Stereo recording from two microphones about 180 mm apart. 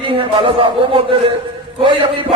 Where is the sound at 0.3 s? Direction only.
30° right (ahead or behind).